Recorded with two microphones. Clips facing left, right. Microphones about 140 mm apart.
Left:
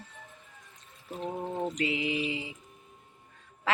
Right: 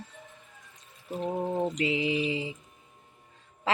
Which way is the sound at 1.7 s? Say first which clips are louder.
Right 3 dB; 25° right (ahead or behind).